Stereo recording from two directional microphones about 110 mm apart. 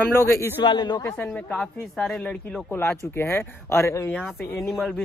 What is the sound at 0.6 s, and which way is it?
Speech, 45° left (ahead or behind).